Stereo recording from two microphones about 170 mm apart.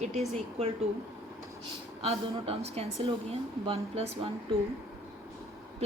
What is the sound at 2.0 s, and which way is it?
A woman's voice, 35° right (ahead or behind).